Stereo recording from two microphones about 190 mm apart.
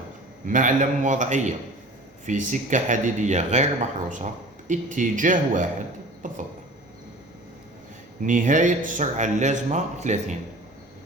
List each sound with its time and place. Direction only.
0.4 s speech: 45° right (ahead or behind)
8.3 s speech: 45° right (ahead or behind)